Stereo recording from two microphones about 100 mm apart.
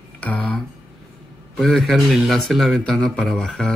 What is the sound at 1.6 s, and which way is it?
Speech, 5° left (ahead or behind).